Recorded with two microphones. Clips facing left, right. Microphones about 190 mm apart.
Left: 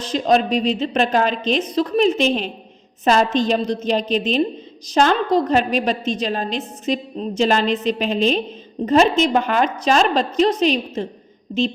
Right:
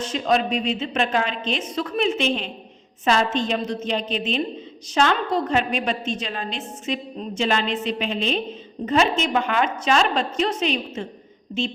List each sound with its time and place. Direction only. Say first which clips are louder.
0.0 s a woman's voice: left 4 dB; 35° left (ahead or behind)